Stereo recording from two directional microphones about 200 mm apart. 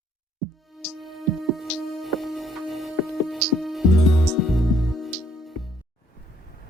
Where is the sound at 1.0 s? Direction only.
Centre (ahead or behind).